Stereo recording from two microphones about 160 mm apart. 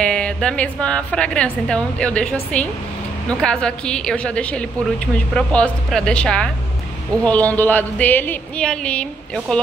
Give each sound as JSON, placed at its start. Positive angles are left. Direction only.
{"t": 0.0, "sound": "a woman's voice", "side_deg": 5}